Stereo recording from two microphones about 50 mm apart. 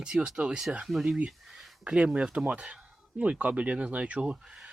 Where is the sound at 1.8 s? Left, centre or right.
Right.